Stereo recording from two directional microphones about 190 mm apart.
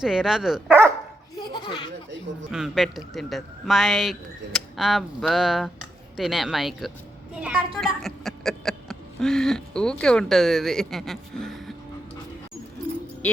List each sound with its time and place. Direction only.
0.0 s speech: 5° right (ahead or behind)
1.4 s a sound: 25° left (ahead or behind)
2.5 s speech: centre (ahead or behind)